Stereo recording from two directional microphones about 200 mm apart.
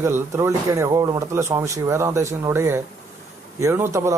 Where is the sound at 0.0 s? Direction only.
10° right (ahead or behind).